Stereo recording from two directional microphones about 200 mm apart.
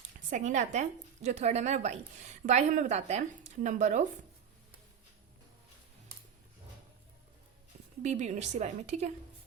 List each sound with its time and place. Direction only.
0.3 s a woman's voice: 35° right (ahead or behind)
8.0 s a woman's voice: 35° right (ahead or behind)